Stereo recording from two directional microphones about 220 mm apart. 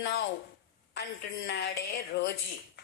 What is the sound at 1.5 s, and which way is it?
Speech, 50° left (ahead or behind).